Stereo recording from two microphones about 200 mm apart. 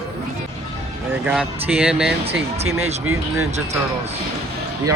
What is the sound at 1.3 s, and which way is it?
Speech, 5° right (ahead or behind).